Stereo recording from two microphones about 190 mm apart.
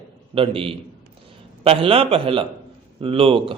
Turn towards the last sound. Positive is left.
turn(degrees=-30)  # may be behind; listen again after turning